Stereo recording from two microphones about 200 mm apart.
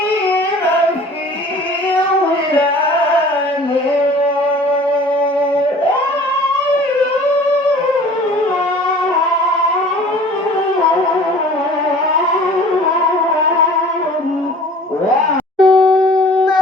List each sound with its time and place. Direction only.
15.5 s shofar: centre (ahead or behind)